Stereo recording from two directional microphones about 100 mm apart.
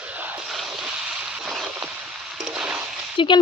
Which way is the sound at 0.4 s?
Centre (ahead or behind).